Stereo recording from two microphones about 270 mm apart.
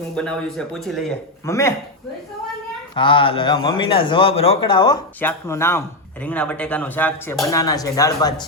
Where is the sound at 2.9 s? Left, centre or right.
Centre.